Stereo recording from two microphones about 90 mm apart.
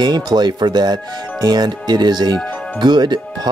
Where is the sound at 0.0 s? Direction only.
50° right (ahead or behind).